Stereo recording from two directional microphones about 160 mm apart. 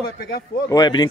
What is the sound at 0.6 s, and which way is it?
Speech, 25° left (ahead or behind).